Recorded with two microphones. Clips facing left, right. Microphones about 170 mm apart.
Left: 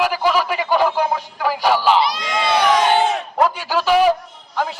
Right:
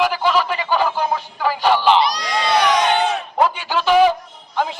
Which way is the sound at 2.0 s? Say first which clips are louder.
Even; 25° left (ahead or behind).